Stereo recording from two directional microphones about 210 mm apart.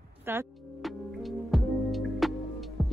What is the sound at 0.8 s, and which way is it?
Music, centre (ahead or behind).